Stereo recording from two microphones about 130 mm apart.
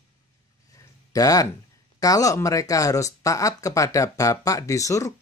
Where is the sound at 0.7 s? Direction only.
25° left (ahead or behind).